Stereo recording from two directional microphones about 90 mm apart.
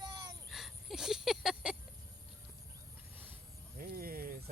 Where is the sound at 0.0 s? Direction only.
55° right (ahead or behind).